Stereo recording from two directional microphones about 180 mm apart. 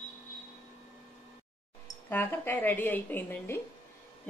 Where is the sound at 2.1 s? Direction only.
10° left (ahead or behind).